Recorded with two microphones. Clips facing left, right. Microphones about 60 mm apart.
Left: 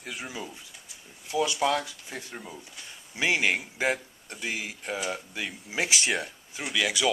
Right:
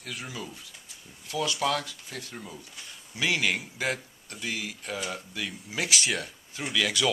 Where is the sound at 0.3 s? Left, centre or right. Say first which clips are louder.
Left 1 dB; centre.